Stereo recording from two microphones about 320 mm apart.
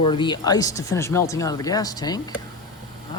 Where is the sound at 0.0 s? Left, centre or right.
Centre.